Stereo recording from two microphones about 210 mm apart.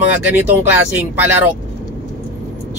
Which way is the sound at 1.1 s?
5° right (ahead or behind).